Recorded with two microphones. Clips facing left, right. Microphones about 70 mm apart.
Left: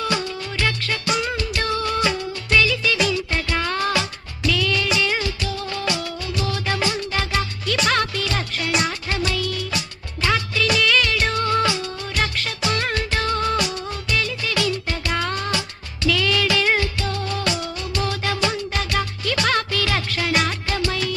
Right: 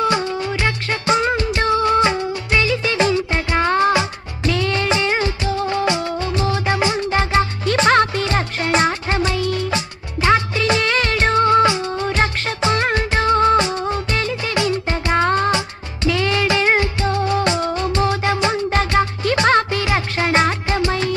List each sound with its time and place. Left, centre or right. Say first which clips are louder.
0.0 s music: right 6 dB; right
4.5 s music of bollywood: right 3 dB; right